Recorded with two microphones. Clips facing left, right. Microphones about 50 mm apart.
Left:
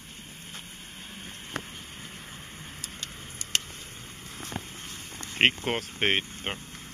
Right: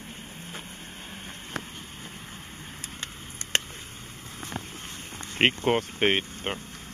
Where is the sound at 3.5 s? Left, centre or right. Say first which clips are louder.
Right 3 dB; right.